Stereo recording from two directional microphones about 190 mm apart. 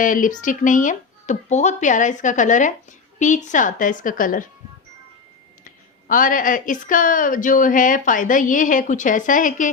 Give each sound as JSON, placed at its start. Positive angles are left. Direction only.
{"t": 0.0, "sound": "speech", "side_deg": 45}
{"t": 5.6, "sound": "speech", "side_deg": 45}